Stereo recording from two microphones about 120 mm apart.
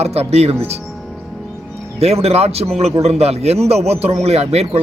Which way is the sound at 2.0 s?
60° right (ahead or behind).